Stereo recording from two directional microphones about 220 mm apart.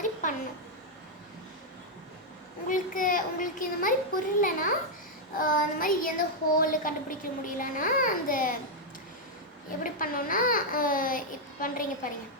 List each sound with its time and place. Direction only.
0.0 s a sound: 35° left (ahead or behind)
2.6 s a child's voice: 35° left (ahead or behind)
9.8 s a child's voice: 40° left (ahead or behind)